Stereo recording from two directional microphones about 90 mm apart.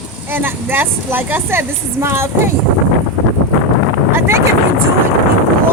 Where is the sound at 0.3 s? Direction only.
25° right (ahead or behind).